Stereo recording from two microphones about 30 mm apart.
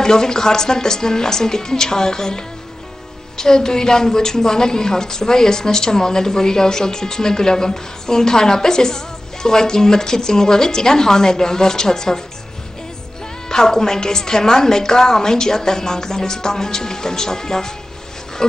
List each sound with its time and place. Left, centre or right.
0.0 s a woman's voice: left
13.5 s a woman's voice: centre